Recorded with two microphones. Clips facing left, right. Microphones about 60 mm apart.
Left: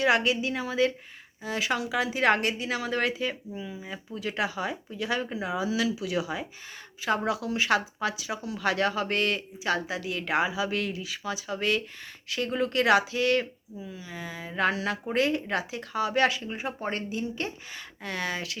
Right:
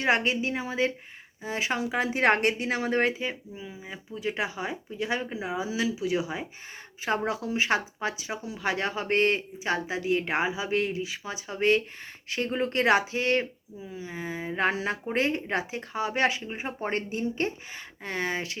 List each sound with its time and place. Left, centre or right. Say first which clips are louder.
0.0 s speech: left 1 dB; right